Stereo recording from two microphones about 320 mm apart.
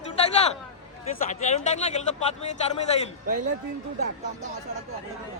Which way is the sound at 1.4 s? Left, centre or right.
Left.